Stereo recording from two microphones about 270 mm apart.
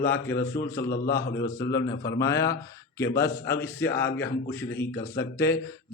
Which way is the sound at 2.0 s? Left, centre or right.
Centre.